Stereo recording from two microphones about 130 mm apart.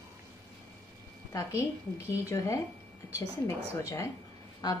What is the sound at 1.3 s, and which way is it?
A woman's voice, 25° left (ahead or behind).